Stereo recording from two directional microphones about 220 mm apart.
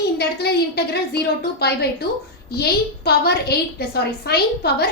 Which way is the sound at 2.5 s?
45° left (ahead or behind).